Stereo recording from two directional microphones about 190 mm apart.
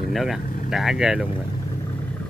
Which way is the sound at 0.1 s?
Centre (ahead or behind).